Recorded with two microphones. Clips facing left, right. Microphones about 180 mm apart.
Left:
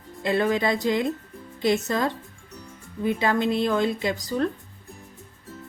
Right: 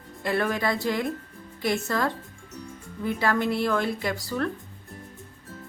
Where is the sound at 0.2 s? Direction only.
20° left (ahead or behind).